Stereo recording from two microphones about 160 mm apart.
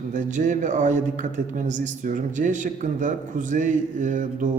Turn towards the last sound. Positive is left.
turn(degrees=-50)  # may be behind; listen again after turning